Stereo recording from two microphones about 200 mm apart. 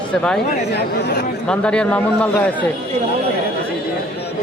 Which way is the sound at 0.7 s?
55° left (ahead or behind).